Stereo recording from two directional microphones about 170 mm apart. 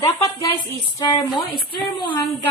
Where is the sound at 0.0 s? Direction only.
15° left (ahead or behind).